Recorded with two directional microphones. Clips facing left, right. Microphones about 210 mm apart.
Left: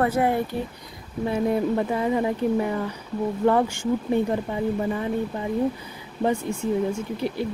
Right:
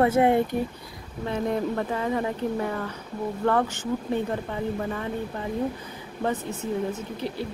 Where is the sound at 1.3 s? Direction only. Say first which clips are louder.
Left 3 dB; 10° left (ahead or behind).